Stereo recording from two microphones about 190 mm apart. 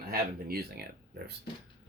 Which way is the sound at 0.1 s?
50° right (ahead or behind).